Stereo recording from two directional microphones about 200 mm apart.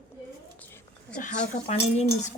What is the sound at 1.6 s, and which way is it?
Speech, 35° left (ahead or behind).